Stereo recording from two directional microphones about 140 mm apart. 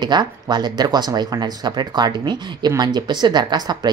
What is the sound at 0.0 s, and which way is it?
Speech, 30° right (ahead or behind).